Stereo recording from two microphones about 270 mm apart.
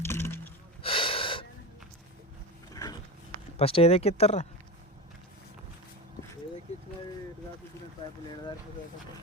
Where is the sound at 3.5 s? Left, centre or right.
Left.